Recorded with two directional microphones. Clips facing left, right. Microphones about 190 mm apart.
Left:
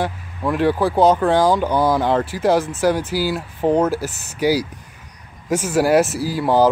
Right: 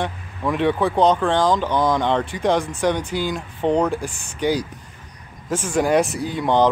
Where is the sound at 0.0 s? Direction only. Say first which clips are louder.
Left 2 dB; 5° left (ahead or behind).